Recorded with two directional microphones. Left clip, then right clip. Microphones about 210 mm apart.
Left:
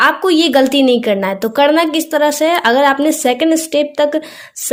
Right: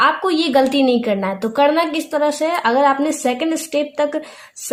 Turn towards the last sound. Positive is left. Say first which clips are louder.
# left 5 dB
turn(degrees=30)  # may be behind; listen again after turning